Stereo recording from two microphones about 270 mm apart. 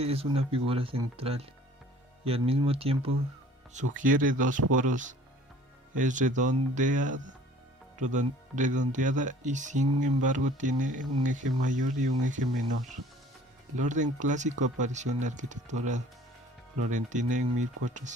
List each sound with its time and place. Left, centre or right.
0.0 s speech: right
13.7 s speech: right